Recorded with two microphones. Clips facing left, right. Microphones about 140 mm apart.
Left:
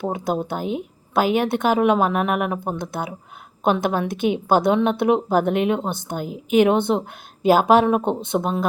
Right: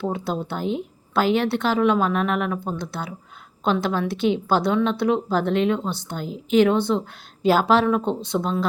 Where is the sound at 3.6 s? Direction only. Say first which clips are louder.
Left 2 dB; 15° left (ahead or behind).